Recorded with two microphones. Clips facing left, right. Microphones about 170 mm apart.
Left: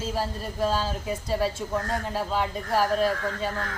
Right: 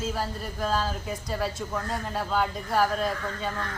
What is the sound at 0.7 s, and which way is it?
Speech, centre (ahead or behind).